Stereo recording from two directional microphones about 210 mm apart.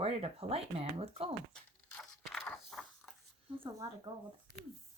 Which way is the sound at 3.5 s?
25° right (ahead or behind).